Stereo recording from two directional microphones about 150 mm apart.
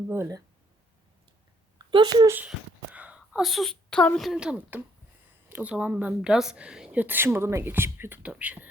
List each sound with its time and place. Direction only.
0.1 s speech: 20° right (ahead or behind)
1.9 s a child's voice: 30° right (ahead or behind)
2.2 s a woman's voice: 15° right (ahead or behind)